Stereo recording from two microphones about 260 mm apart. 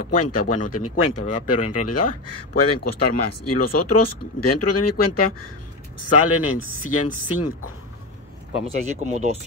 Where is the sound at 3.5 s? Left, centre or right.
Left.